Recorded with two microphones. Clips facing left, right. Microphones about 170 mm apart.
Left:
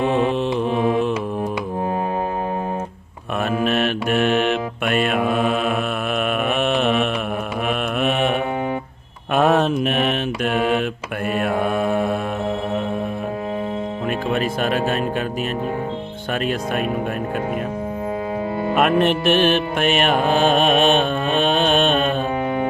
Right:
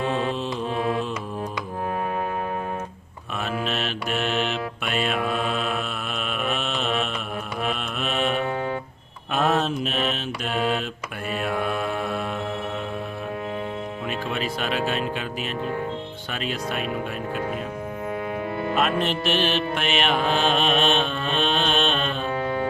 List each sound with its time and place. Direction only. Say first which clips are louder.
0.0 s mantra: left 7 dB; 15° left (ahead or behind)
3.6 s mantra: left 8 dB; 55° left (ahead or behind)
14.3 s music: left 7 dB; 50° left (ahead or behind)
18.8 s music: left 8 dB; 55° left (ahead or behind)